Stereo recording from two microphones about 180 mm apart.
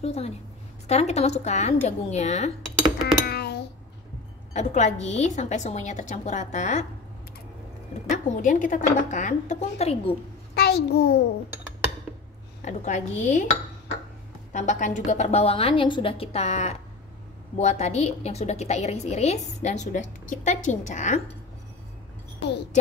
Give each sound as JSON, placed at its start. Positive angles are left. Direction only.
{"t": 0.0, "sound": "a woman's voice", "side_deg": 35}
{"t": 3.3, "sound": "a sound", "side_deg": 65}
{"t": 4.6, "sound": "a woman's voice", "side_deg": 40}
{"t": 8.4, "sound": "a woman's voice", "side_deg": 45}
{"t": 10.5, "sound": "a child's voice", "side_deg": 60}
{"t": 12.6, "sound": "a woman's voice", "side_deg": 40}
{"t": 14.5, "sound": "a woman's voice", "side_deg": 40}